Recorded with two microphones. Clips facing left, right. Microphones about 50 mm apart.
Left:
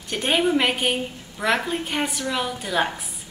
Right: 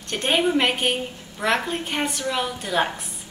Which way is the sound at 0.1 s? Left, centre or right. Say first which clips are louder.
Even; centre.